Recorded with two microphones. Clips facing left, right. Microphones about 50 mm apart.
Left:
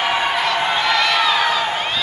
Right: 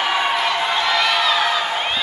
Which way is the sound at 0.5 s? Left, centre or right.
Centre.